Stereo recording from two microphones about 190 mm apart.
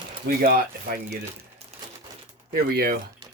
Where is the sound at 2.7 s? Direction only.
55° right (ahead or behind).